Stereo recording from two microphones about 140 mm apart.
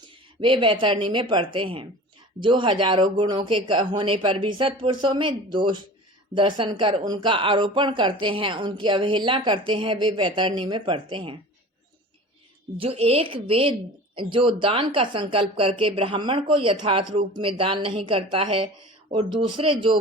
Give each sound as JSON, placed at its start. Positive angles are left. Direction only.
{"t": 0.3, "sound": "speech", "side_deg": -35}
{"t": 12.7, "sound": "speech", "side_deg": -40}